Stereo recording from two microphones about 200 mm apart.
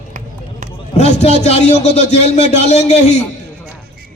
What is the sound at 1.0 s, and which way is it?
Speech, 30° left (ahead or behind).